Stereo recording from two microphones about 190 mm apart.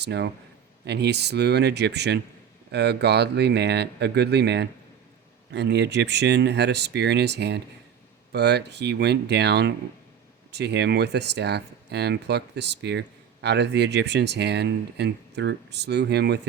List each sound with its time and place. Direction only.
0.0 s speech: 60° right (ahead or behind)